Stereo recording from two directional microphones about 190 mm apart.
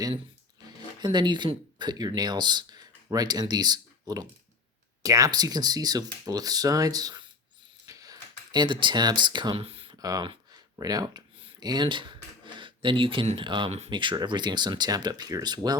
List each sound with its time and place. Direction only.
1.0 s speech: 25° right (ahead or behind)
7.9 s a sound: 20° right (ahead or behind)
12.5 s speech: 25° right (ahead or behind)